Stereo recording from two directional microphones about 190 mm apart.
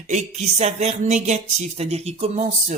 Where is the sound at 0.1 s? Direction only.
40° right (ahead or behind).